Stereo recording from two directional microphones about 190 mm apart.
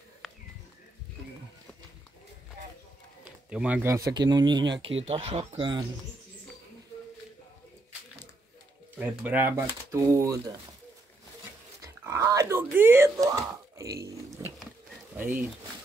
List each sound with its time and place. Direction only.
0.2 s a sound: centre (ahead or behind)
3.4 s speech: 5° right (ahead or behind); by 5.9 s 25° right (ahead or behind)
8.9 s speech: 10° right (ahead or behind)
11.8 s dog: 15° right (ahead or behind)
13.9 s pig: 15° right (ahead or behind)
15.1 s speech: 10° right (ahead or behind)